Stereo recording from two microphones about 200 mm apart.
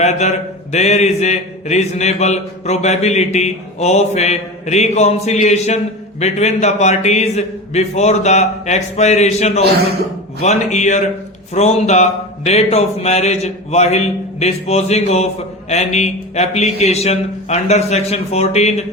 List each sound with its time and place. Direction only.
0.0 s a man's voice: 35° left (ahead or behind)